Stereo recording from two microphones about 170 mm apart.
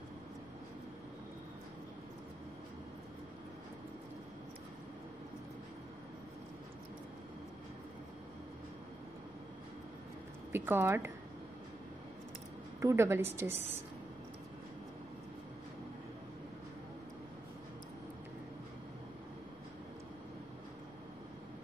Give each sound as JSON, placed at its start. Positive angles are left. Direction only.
{"t": 10.5, "sound": "speech", "side_deg": -15}
{"t": 12.8, "sound": "a woman's voice", "side_deg": -15}